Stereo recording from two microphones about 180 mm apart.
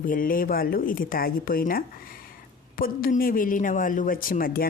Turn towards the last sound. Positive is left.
turn(degrees=55)  # may be behind; listen again after turning